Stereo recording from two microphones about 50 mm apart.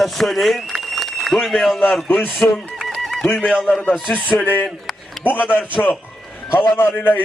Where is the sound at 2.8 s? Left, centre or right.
Centre.